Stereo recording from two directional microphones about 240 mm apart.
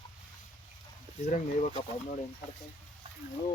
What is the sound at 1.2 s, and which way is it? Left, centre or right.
Speech, left.